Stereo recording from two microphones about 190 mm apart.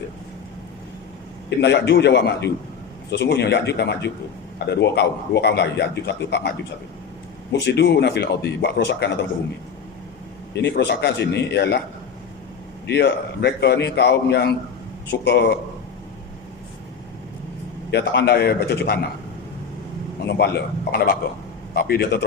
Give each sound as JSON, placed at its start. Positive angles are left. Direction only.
{"t": 1.5, "sound": "a man's voice", "side_deg": 65}
{"t": 7.5, "sound": "a man's voice", "side_deg": 65}
{"t": 10.5, "sound": "a man's voice", "side_deg": 65}
{"t": 12.9, "sound": "a man's voice", "side_deg": 65}
{"t": 17.9, "sound": "a man's voice", "side_deg": 65}
{"t": 20.2, "sound": "a man's voice", "side_deg": 60}